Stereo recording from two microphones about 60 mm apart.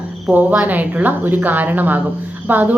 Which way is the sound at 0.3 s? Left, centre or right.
Right.